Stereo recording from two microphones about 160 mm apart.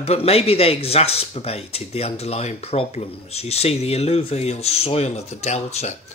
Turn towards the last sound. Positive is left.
turn(degrees=40)  # may be behind; listen again after turning